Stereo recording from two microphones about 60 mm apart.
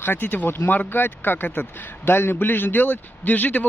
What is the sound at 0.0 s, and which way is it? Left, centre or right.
Speech, left.